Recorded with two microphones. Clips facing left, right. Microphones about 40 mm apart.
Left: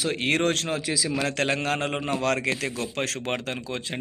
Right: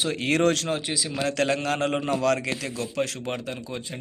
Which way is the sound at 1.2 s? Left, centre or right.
Left.